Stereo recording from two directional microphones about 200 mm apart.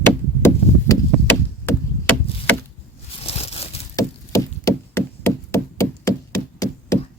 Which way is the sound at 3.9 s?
15° left (ahead or behind).